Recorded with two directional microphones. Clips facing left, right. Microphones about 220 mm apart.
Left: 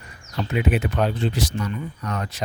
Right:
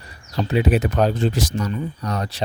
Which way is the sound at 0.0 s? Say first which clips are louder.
Right 4 dB; 35° right (ahead or behind).